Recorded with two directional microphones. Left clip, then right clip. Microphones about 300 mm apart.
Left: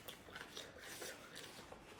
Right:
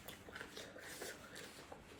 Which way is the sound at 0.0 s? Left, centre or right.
Centre.